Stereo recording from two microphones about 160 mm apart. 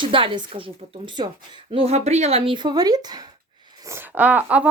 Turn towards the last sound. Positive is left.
turn(degrees=-10)  # may be behind; listen again after turning